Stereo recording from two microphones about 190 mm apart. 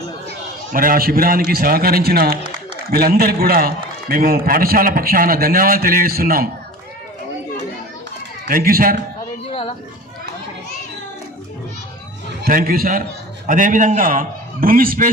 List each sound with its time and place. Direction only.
0.7 s a man's voice: 50° right (ahead or behind)
8.4 s a man's voice: 50° right (ahead or behind)
9.5 s a sound: 30° left (ahead or behind)
12.4 s a man's voice: 50° right (ahead or behind)